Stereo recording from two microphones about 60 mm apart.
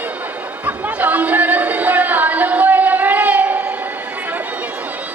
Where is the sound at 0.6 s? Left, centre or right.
Right.